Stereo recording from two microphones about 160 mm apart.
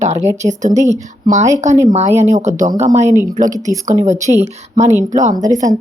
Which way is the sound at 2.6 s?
50° right (ahead or behind).